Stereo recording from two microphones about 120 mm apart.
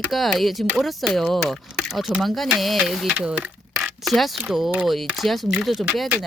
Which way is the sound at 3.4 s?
5° right (ahead or behind).